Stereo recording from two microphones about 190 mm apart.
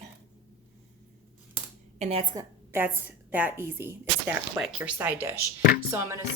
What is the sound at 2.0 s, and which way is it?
Speech, 30° right (ahead or behind).